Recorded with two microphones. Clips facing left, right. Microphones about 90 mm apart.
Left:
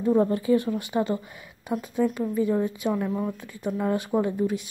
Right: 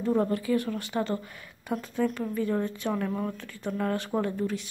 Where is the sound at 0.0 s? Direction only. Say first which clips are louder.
Left 4 dB; 20° left (ahead or behind).